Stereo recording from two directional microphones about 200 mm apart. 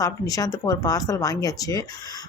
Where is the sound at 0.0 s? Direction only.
20° left (ahead or behind).